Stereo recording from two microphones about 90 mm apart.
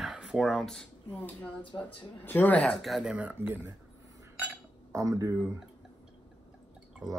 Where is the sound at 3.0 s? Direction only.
15° right (ahead or behind).